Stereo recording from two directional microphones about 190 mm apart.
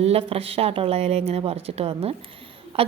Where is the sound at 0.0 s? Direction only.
30° right (ahead or behind).